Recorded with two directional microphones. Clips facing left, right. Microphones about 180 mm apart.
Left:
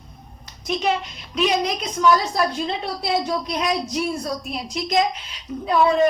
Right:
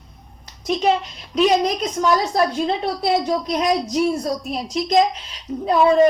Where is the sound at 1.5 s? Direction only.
40° right (ahead or behind).